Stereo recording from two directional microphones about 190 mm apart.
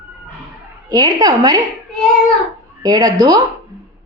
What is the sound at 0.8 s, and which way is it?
Speech, 20° right (ahead or behind).